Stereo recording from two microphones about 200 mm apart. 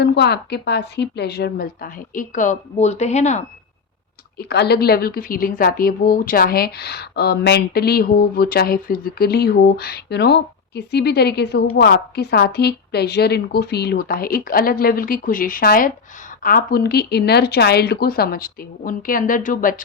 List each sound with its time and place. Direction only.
0.0 s a woman's voice: 55° left (ahead or behind); by 3.4 s 35° left (ahead or behind)
4.4 s a woman's voice: 55° left (ahead or behind)